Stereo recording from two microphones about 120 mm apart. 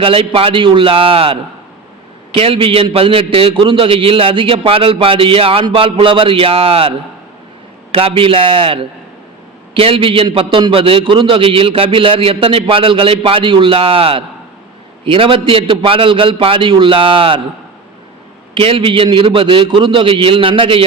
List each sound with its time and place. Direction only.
0.0 s a man's voice: 50° right (ahead or behind)
7.9 s a man's voice: 50° right (ahead or behind)
18.5 s a man's voice: 45° right (ahead or behind)